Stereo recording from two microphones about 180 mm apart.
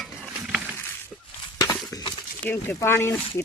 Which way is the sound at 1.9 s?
20° left (ahead or behind).